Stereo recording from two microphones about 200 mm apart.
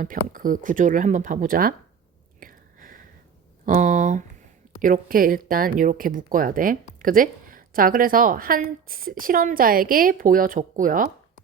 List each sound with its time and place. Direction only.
0.0 s speech: 40° right (ahead or behind)
2.4 s whispering: 45° right (ahead or behind)
3.7 s a sound: 40° right (ahead or behind)
4.8 s speech: 45° right (ahead or behind)